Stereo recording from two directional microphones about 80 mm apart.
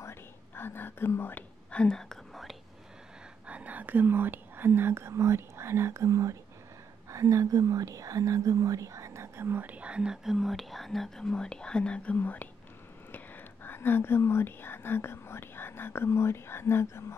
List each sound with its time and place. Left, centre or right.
0.0 s whispering: left
1.7 s whispering: centre
3.4 s speech: centre
10.3 s speech: centre; by 17.0 s left